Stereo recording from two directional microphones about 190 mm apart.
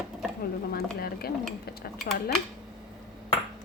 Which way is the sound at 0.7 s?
55° left (ahead or behind).